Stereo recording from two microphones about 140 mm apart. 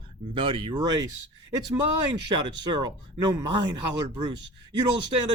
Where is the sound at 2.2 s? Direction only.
30° right (ahead or behind).